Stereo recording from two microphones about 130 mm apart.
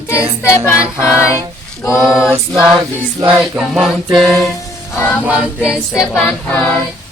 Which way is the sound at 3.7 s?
Centre (ahead or behind).